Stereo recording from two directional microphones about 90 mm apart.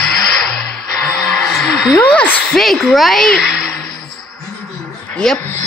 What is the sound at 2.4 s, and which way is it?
Speech, 5° left (ahead or behind).